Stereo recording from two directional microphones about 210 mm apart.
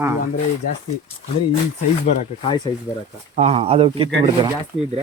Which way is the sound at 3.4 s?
30° right (ahead or behind).